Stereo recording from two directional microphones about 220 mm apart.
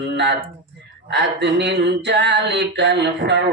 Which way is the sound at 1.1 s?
55° right (ahead or behind).